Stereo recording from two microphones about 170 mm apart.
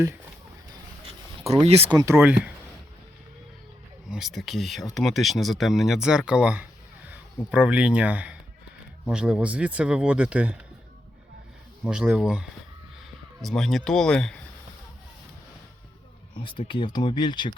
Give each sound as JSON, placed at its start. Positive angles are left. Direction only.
{"t": 1.6, "sound": "speech", "side_deg": -35}
{"t": 2.0, "sound": "speech", "side_deg": -15}
{"t": 4.1, "sound": "speech", "side_deg": 0}
{"t": 11.9, "sound": "speech", "side_deg": -5}
{"t": 16.4, "sound": "speech", "side_deg": 30}